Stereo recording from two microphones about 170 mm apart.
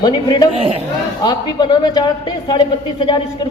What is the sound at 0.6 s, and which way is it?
Speech, 35° right (ahead or behind).